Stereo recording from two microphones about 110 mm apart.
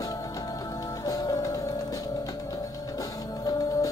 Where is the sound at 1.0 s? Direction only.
35° left (ahead or behind).